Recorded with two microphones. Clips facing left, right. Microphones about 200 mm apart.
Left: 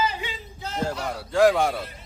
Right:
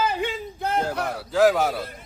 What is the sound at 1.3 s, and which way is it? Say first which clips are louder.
Speech: even; centre (ahead or behind).